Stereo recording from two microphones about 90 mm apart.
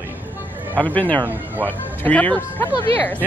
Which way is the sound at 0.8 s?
20° left (ahead or behind).